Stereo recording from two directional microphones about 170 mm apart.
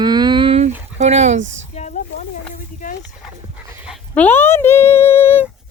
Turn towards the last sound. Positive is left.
turn(degrees=15)  # may be behind; listen again after turning